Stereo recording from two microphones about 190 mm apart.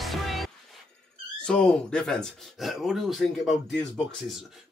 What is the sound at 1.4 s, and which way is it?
Speech, 5° left (ahead or behind).